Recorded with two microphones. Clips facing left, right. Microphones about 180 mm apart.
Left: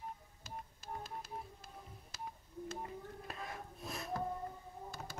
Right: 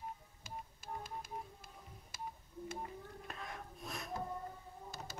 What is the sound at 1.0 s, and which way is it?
Music, 50° right (ahead or behind).